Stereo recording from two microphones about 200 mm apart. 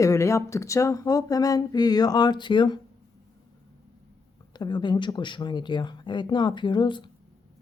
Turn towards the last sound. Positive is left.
turn(degrees=25)  # may be behind; listen again after turning